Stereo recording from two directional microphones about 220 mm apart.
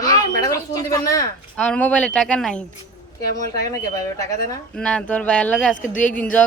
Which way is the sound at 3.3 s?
15° left (ahead or behind).